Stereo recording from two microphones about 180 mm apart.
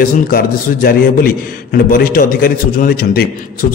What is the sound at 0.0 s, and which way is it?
A man's voice, 55° left (ahead or behind).